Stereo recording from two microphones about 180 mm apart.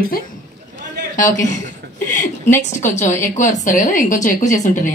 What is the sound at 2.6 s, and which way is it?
A woman's voice, 40° left (ahead or behind).